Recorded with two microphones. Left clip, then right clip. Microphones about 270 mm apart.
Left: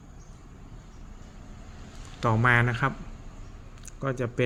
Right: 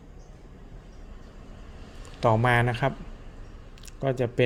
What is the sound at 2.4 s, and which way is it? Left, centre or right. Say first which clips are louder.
Speech: left 1 dB; centre.